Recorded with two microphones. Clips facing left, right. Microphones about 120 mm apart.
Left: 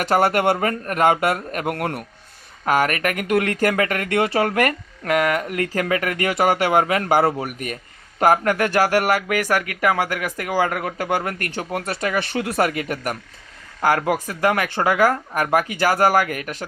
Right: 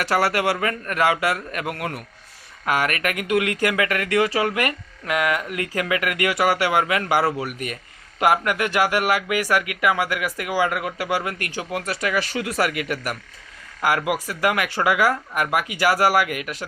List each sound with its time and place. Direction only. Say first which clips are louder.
0.0 s speech: left 3 dB; 45° left (ahead or behind)
4.4 s speech: left 3 dB; 45° left (ahead or behind)
12.1 s speech: left 3 dB; 25° left (ahead or behind)